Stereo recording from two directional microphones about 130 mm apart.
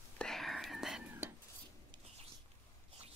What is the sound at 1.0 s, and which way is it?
Whispering, 15° right (ahead or behind).